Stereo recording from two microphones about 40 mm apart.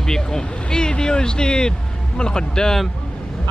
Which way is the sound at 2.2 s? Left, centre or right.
Left.